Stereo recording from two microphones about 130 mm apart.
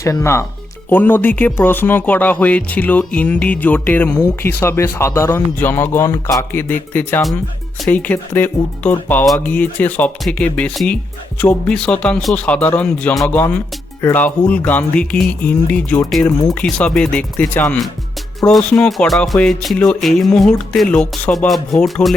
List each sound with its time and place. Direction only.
0.2 s speech: 20° left (ahead or behind)
18.3 s speech: centre (ahead or behind)
18.7 s music: 5° left (ahead or behind)